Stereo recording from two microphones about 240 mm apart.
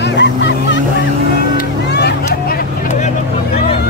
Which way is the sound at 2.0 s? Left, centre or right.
Left.